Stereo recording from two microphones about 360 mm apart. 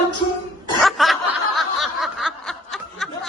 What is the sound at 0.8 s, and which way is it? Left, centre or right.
Snicker, centre.